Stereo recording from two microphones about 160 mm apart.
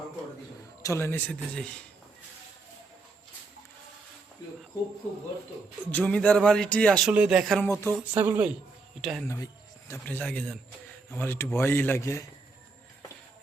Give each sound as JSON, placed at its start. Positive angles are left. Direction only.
{"t": 0.8, "sound": "a man's voice", "side_deg": 20}
{"t": 5.8, "sound": "speech", "side_deg": 10}
{"t": 7.1, "sound": "a man's voice", "side_deg": -5}
{"t": 7.6, "sound": "speech", "side_deg": 15}
{"t": 8.1, "sound": "a man's voice", "side_deg": -10}
{"t": 9.0, "sound": "a man's voice", "side_deg": 0}
{"t": 9.2, "sound": "speech", "side_deg": 20}